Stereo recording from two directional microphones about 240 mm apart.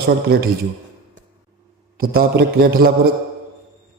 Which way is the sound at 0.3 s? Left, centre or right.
Right.